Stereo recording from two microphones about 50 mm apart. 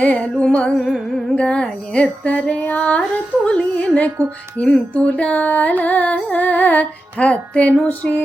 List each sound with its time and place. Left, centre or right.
0.0 s music: left
0.8 s music: centre
1.4 s music: left
5.8 s carnatic music: left
6.3 s music: left